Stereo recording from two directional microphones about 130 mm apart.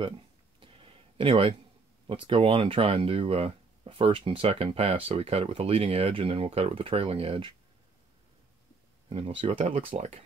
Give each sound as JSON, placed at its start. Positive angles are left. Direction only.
{"t": 0.6, "sound": "a sound", "side_deg": -45}
{"t": 2.0, "sound": "speech", "side_deg": -45}
{"t": 9.1, "sound": "speech", "side_deg": -45}